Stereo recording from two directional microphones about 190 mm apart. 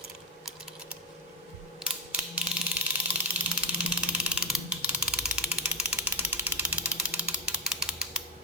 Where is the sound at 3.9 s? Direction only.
10° right (ahead or behind).